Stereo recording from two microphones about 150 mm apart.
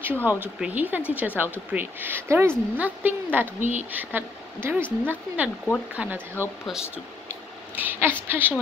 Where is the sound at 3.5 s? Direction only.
50° right (ahead or behind).